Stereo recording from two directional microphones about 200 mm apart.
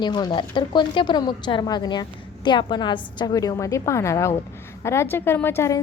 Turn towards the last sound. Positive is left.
turn(degrees=10)  # may be behind; listen again after turning